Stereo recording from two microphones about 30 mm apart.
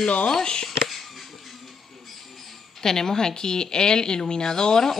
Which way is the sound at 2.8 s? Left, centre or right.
Centre.